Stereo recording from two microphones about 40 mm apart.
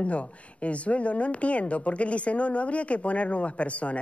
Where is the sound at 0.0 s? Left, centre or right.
Left.